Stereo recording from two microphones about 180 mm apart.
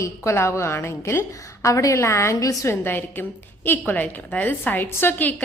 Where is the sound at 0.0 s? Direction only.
15° left (ahead or behind).